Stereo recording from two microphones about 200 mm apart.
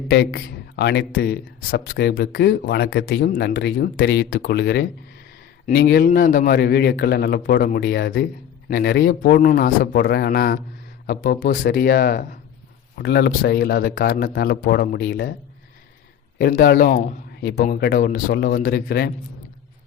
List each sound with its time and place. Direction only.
0.1 s a man's voice: 60° left (ahead or behind)
16.4 s speech: 45° left (ahead or behind)